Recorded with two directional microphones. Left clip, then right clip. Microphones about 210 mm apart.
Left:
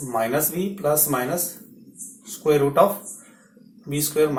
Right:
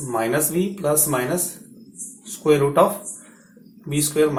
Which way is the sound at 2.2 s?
30° right (ahead or behind).